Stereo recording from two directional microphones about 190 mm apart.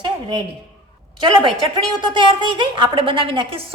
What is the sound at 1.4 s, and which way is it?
A woman's voice, 25° right (ahead or behind).